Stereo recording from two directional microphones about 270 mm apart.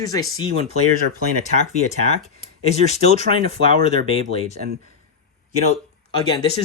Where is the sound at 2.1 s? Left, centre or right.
Left.